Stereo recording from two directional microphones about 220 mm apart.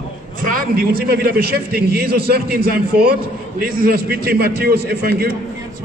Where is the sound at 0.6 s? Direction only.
40° right (ahead or behind).